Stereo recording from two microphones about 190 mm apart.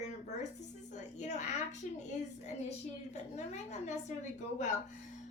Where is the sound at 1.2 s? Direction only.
40° left (ahead or behind).